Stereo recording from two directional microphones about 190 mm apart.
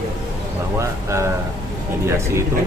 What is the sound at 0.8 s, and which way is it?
Speech, 15° right (ahead or behind).